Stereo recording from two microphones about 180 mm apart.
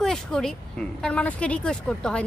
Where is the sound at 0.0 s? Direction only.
5° left (ahead or behind).